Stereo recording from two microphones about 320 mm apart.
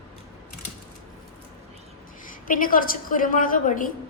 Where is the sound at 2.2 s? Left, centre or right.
Left.